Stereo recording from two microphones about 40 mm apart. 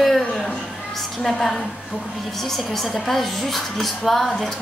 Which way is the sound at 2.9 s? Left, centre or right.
Centre.